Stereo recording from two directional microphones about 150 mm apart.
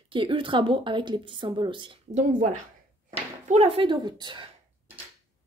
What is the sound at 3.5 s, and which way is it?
Speech, 45° right (ahead or behind).